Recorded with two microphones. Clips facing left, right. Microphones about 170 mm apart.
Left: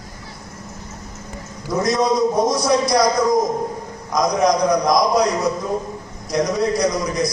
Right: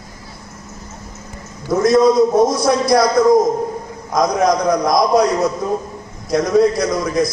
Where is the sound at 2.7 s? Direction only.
55° right (ahead or behind).